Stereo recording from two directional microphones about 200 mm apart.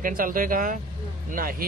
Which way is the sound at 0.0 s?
45° right (ahead or behind).